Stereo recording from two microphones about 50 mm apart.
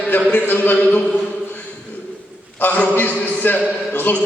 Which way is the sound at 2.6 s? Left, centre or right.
Left.